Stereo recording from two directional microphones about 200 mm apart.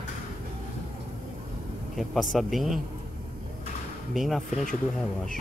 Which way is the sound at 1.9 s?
Centre (ahead or behind).